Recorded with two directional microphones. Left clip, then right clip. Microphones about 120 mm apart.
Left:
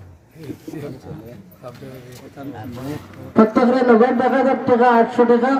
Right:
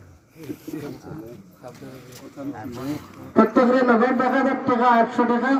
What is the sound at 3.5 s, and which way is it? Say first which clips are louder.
A man's voice: left 3 dB; 5° left (ahead or behind).